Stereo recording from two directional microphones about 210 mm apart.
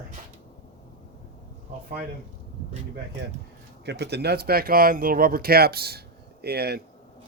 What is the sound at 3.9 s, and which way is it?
Speech, 55° right (ahead or behind).